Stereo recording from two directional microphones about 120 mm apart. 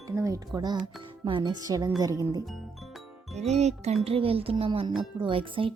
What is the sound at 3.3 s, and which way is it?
Speech, 65° right (ahead or behind).